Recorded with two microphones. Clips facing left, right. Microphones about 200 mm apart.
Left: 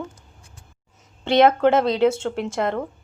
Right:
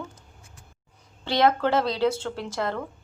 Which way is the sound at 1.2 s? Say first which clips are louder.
Left 6 dB; 25° left (ahead or behind).